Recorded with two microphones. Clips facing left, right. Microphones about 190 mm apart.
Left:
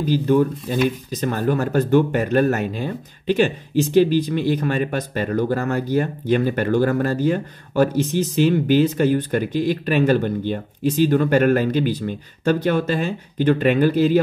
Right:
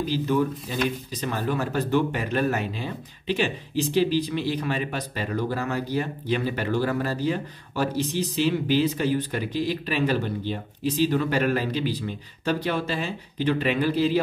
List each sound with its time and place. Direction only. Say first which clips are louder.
0.1 s speech: left 9 dB; 45° left (ahead or behind)